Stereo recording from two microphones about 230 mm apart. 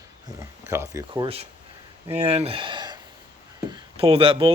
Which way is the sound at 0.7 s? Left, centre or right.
Centre.